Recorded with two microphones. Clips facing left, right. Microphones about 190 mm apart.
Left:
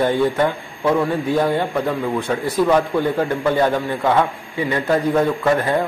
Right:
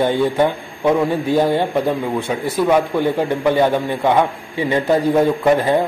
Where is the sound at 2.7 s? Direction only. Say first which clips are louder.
Right 4 dB; 15° right (ahead or behind).